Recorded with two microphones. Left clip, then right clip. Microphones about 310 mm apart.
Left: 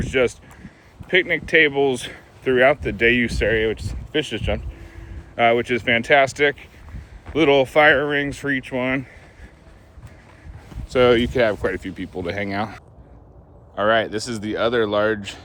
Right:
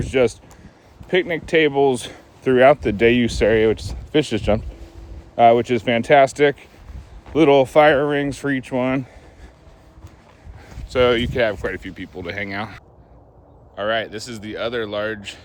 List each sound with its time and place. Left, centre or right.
0.1 s speech: right
10.8 s speech: centre
13.7 s speech: centre